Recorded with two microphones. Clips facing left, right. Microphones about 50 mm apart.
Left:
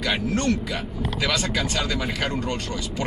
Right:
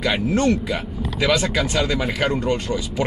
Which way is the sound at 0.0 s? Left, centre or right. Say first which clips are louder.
Right 4 dB; centre.